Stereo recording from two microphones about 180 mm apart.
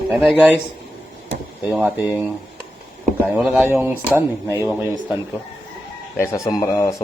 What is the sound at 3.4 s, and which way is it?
Speech, 5° right (ahead or behind).